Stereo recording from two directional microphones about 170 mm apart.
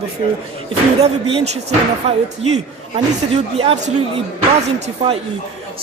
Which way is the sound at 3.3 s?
35° right (ahead or behind).